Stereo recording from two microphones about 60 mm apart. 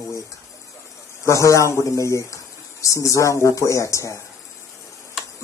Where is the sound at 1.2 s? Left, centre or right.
Left.